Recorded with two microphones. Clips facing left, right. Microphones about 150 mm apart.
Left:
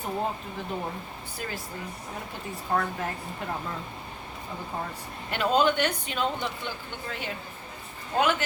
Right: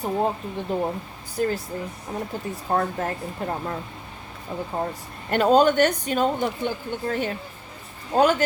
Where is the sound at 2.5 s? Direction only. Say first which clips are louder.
Right 3 dB; 40° right (ahead or behind).